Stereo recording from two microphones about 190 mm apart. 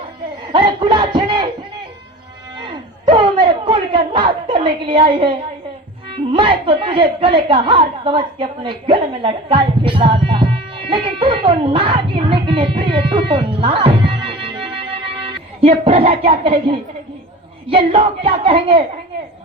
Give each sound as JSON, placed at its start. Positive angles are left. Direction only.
{"t": 0.4, "sound": "speech", "side_deg": -25}
{"t": 2.6, "sound": "a sound", "side_deg": -25}
{"t": 6.3, "sound": "a woman's voice", "side_deg": -25}